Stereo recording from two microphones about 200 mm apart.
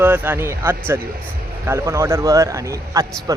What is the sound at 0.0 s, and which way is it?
A man's voice, 10° right (ahead or behind).